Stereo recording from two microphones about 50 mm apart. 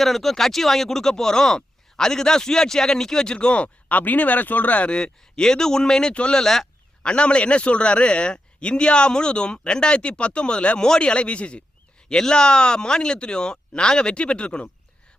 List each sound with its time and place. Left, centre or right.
0.0 s speech: centre; by 4.9 s left
4.9 s speech: centre
6.4 s speech: centre
7.0 s a man's voice: left